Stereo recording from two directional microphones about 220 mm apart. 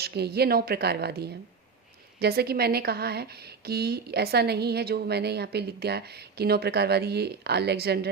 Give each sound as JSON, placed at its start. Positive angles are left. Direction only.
{"t": 0.0, "sound": "a woman's voice", "side_deg": -45}